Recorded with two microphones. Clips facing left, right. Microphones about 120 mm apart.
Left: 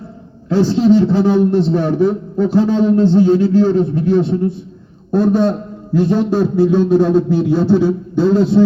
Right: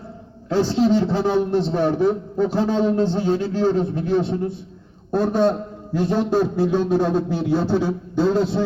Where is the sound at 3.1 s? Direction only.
25° right (ahead or behind).